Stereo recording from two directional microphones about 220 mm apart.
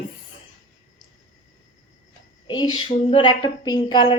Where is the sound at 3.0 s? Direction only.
25° left (ahead or behind).